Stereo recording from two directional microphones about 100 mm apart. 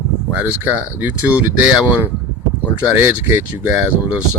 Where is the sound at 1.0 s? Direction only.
15° right (ahead or behind).